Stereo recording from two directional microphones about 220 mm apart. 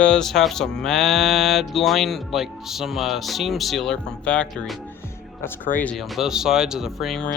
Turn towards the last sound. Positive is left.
turn(degrees=0)  # may be behind; listen again after turning